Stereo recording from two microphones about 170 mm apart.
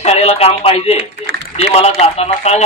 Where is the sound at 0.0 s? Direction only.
35° left (ahead or behind).